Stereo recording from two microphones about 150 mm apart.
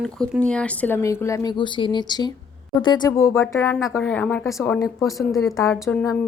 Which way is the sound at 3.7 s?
Centre (ahead or behind).